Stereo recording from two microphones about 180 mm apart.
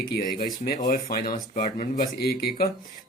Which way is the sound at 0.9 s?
50° left (ahead or behind).